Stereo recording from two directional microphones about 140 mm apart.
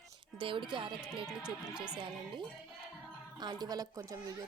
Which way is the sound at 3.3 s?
30° right (ahead or behind).